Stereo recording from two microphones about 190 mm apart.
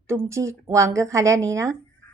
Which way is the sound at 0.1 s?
15° right (ahead or behind).